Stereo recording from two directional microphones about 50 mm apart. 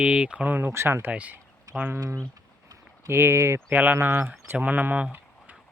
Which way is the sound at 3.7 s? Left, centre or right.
Right.